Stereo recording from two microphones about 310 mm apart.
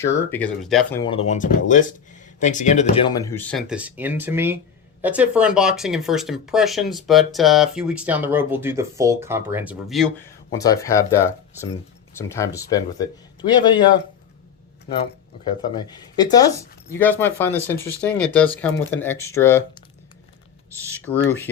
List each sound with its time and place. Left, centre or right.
0.0 s speech: centre; by 3.0 s left
3.1 s speech: centre
10.5 s speech: centre
15.6 s speech: centre
21.0 s speech: centre